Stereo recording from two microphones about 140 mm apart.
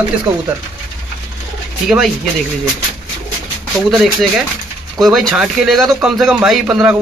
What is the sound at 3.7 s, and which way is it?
A man's voice, centre (ahead or behind).